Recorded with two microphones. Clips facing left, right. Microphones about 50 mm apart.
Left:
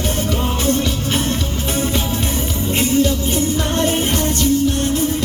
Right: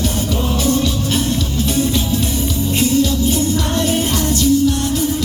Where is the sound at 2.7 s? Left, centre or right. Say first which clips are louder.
Even; left.